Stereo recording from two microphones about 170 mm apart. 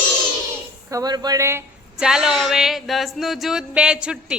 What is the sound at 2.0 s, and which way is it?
Music, 5° right (ahead or behind).